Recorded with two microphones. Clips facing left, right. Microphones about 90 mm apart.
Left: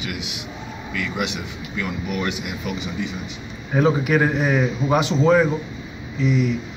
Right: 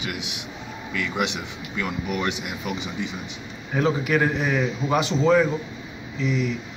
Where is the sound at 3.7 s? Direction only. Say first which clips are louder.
Left 4 dB; 20° left (ahead or behind).